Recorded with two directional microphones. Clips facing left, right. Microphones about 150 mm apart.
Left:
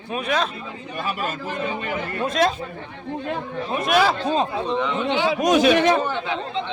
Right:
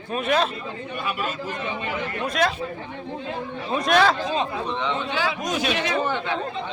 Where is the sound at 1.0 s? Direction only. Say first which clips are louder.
Left 2 dB; 40° left (ahead or behind).